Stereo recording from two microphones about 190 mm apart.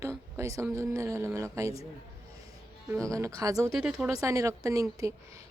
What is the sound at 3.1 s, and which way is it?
Speech, 15° right (ahead or behind).